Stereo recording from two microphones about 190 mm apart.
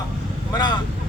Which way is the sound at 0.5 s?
25° left (ahead or behind).